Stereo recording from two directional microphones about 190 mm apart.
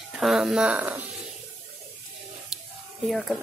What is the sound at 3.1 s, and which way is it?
Speech, centre (ahead or behind).